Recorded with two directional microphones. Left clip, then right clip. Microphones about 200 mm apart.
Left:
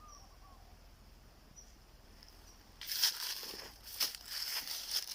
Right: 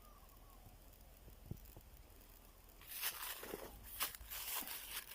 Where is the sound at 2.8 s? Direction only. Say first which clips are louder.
Left 12 dB; 20° left (ahead or behind).